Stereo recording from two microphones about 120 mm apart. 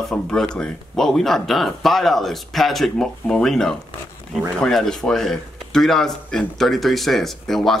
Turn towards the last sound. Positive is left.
turn(degrees=0)  # may be behind; listen again after turning